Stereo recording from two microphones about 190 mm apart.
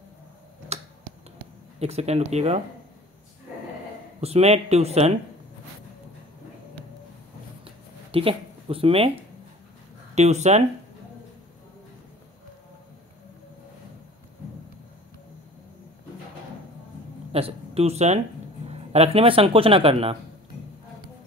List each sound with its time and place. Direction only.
0.7 s finger snapping: 35° right (ahead or behind)
1.8 s speech: 35° right (ahead or behind)
4.2 s speech: 35° right (ahead or behind)
7.6 s a sound: 30° right (ahead or behind)
10.1 s speech: 35° right (ahead or behind)
17.3 s speech: 30° right (ahead or behind)